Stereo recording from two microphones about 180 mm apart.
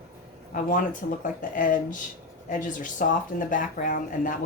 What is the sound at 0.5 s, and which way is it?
Speech, 50° left (ahead or behind).